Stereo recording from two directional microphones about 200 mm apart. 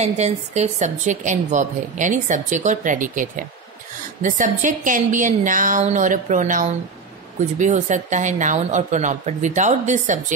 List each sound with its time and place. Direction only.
0.0 s a woman's voice: 35° right (ahead or behind)